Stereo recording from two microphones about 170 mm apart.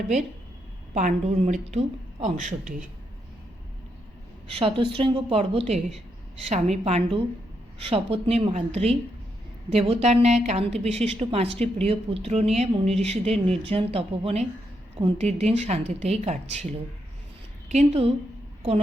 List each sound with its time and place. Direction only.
0.9 s a woman's voice: 45° right (ahead or behind)
4.5 s a woman's voice: 35° right (ahead or behind)
17.7 s a woman's voice: 40° right (ahead or behind)